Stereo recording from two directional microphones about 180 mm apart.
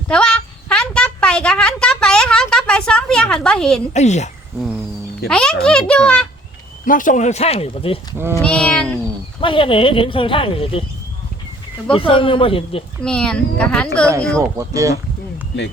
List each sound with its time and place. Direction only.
0.1 s a sound: 5° left (ahead or behind)
3.9 s speech: 40° left (ahead or behind)
5.3 s a child's voice: 5° left (ahead or behind)
6.8 s speech: 45° left (ahead or behind); by 7.9 s 30° left (ahead or behind)
8.4 s a child's voice: 5° left (ahead or behind)
9.4 s speech: 30° left (ahead or behind)
11.9 s speech: 30° left (ahead or behind)
13.0 s a child's voice: 5° left (ahead or behind)
14.1 s speech: 15° right (ahead or behind)